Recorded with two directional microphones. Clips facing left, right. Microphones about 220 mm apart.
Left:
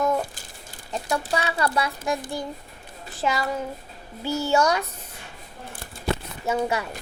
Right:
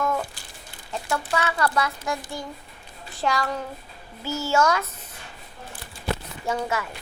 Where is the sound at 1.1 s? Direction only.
15° left (ahead or behind).